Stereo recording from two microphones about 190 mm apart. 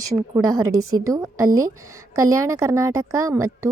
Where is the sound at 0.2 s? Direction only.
15° right (ahead or behind).